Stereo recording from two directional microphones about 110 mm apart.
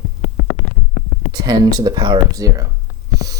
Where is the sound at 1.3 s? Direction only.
35° right (ahead or behind).